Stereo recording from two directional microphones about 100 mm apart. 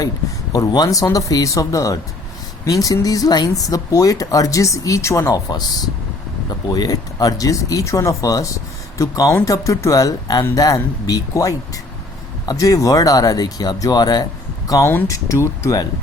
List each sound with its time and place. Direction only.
0.5 s speech: 40° left (ahead or behind)
5.3 s speech: 40° left (ahead or behind)
14.8 s speech: 25° left (ahead or behind)